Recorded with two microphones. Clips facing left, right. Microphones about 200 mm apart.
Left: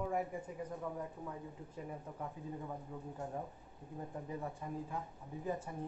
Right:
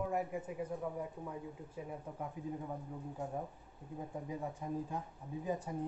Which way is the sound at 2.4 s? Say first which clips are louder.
Right 4 dB; 15° right (ahead or behind).